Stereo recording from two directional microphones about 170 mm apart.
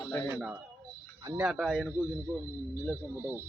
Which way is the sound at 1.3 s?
5° right (ahead or behind).